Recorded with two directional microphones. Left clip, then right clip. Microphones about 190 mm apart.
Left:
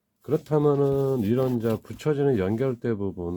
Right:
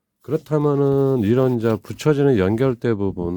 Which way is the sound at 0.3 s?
40° right (ahead or behind).